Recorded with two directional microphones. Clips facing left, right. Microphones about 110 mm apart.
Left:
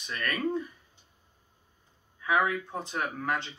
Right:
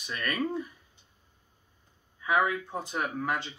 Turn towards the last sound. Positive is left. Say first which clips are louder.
# even
turn(degrees=-5)  # may be behind; listen again after turning